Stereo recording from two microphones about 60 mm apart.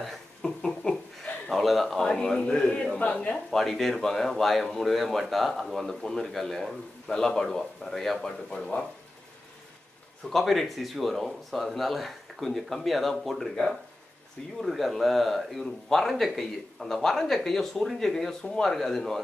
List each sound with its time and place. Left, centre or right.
0.0 s chuckle: centre
3.1 s a man's voice: centre
3.4 s a man's voice: centre
10.3 s a man's voice: centre